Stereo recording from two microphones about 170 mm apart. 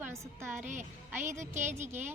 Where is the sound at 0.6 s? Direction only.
45° right (ahead or behind).